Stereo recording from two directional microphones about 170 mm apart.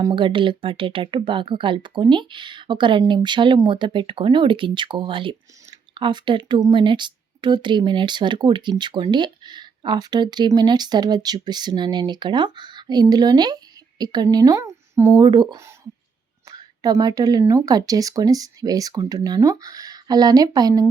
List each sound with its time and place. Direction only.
0.0 s speech: 30° right (ahead or behind)